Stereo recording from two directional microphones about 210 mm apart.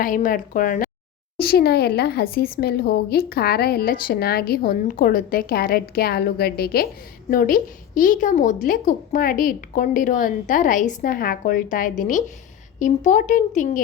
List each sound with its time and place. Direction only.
0.0 s a woman's voice: 40° left (ahead or behind)